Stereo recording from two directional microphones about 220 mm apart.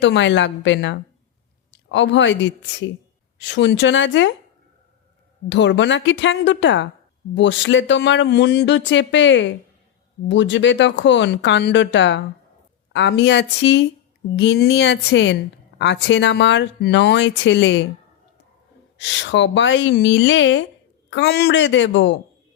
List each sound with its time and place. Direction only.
0.0 s speech: 55° left (ahead or behind)
5.5 s speech: 55° left (ahead or behind)
18.9 s speech: 55° left (ahead or behind)